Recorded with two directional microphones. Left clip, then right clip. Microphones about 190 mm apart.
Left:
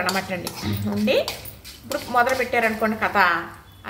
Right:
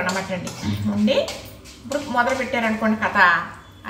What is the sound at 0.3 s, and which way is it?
Speech, 30° left (ahead or behind).